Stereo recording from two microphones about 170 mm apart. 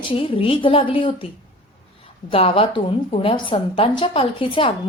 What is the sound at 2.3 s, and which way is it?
Speech, 35° left (ahead or behind).